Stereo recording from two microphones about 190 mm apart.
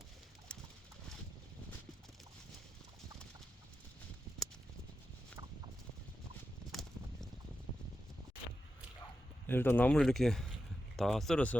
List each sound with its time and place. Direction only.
0.5 s a sound: 5° left (ahead or behind)
6.7 s clip-clop: centre (ahead or behind)
9.5 s speech: 10° left (ahead or behind)